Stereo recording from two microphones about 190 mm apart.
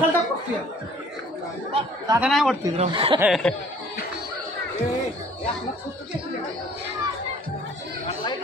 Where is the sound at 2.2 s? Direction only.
Centre (ahead or behind).